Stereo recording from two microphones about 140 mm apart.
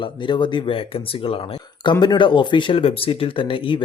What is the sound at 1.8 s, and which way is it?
Speech, 30° left (ahead or behind).